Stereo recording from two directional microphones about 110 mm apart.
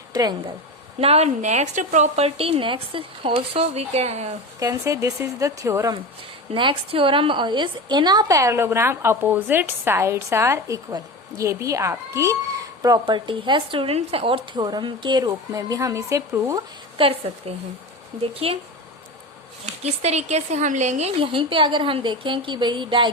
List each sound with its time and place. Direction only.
0.1 s speech: 35° right (ahead or behind)
0.9 s a woman's voice: 70° right (ahead or behind); by 4.3 s 90° right
4.6 s a woman's voice: 25° right (ahead or behind)
6.5 s a woman's voice: 55° right (ahead or behind); by 12.4 s 25° right (ahead or behind)
12.8 s a woman's voice: 35° right (ahead or behind)
15.3 s a woman's voice: 30° right (ahead or behind)
17.0 s a woman's voice: 65° right (ahead or behind)
19.8 s speech: 85° right
21.2 s a woman's voice: 50° right (ahead or behind)